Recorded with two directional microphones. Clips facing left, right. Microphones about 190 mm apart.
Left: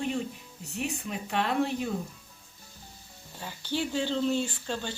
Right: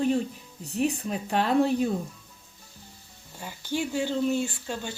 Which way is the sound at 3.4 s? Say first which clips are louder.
Right 2 dB; 10° right (ahead or behind).